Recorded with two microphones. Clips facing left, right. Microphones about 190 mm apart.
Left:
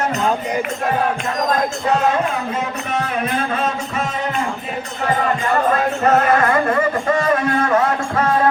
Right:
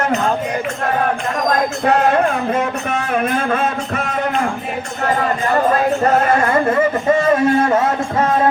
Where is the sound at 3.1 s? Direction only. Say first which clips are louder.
Right 3 dB; 50° right (ahead or behind).